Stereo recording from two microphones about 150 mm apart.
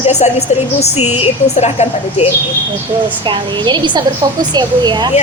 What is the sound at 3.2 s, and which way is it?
A woman's voice, 30° right (ahead or behind).